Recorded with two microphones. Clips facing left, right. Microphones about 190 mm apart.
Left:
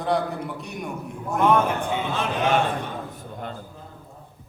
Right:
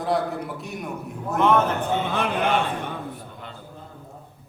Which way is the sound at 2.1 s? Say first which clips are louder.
Left 2 dB; 55° right (ahead or behind).